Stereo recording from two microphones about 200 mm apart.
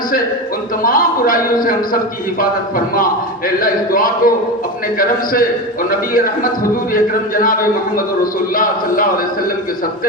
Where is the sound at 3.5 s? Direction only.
45° left (ahead or behind).